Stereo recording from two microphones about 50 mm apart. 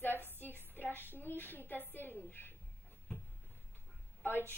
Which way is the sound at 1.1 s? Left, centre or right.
Left.